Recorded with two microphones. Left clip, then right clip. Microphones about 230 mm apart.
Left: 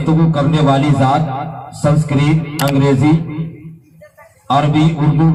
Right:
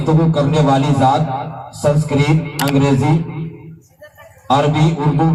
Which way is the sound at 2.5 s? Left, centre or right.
Centre.